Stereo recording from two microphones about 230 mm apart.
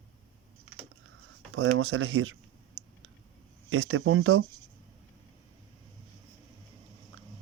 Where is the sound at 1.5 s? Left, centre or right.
Right.